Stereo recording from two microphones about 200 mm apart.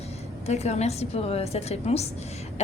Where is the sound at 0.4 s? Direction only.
30° left (ahead or behind).